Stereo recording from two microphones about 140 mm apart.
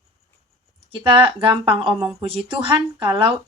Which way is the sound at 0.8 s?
40° right (ahead or behind).